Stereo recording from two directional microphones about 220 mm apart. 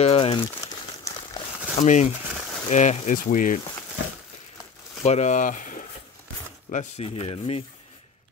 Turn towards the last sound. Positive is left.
turn(degrees=25)  # may be behind; listen again after turning